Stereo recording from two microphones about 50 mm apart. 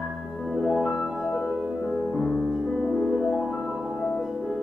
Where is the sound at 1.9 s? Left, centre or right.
Centre.